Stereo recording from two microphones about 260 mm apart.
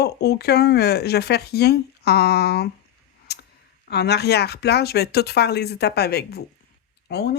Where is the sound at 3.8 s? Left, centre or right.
Left.